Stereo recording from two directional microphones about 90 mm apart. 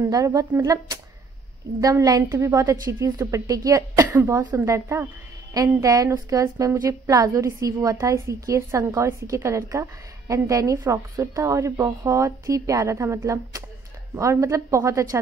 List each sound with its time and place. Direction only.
0.0 s a woman's voice: 40° right (ahead or behind)
5.5 s a woman's voice: 40° right (ahead or behind)